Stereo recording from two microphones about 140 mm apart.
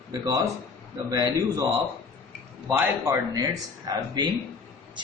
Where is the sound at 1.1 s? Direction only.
25° right (ahead or behind).